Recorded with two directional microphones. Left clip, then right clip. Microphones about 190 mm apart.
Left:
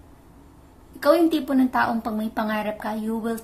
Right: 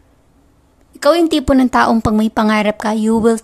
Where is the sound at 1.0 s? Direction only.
45° right (ahead or behind).